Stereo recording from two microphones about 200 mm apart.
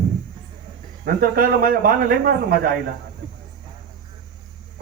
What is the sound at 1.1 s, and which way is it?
A man's voice, 45° right (ahead or behind).